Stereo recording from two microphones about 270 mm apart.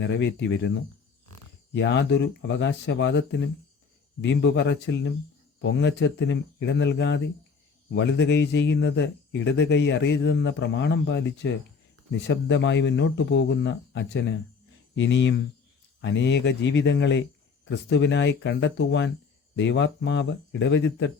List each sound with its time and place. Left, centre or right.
0.0 s a man's voice: left